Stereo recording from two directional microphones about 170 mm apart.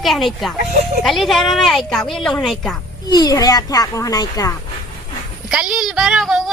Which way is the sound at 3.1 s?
20° left (ahead or behind).